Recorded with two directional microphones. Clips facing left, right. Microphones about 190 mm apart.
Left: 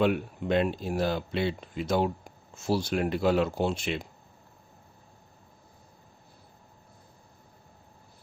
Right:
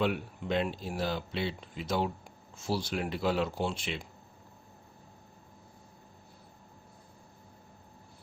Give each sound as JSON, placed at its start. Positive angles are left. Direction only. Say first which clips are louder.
{"t": 0.0, "sound": "speech", "louder": "left 5 dB", "side_deg": 50}